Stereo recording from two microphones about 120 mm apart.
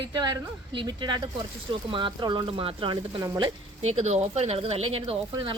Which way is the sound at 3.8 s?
65° right (ahead or behind).